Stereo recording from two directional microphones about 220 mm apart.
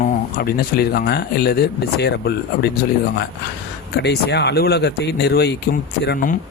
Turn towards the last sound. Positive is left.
turn(degrees=45)  # may be behind; listen again after turning